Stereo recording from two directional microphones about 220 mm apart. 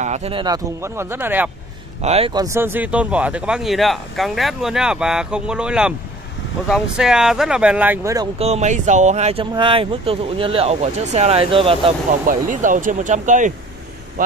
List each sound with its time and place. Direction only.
0.0 s speech: 30° right (ahead or behind); by 1.5 s 10° right (ahead or behind)
2.0 s speech: 25° right (ahead or behind)
8.4 s speech: 30° right (ahead or behind)
12.3 s speech: 35° right (ahead or behind)